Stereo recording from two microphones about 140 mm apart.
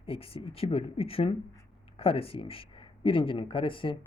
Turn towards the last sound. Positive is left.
turn(degrees=40)  # may be behind; listen again after turning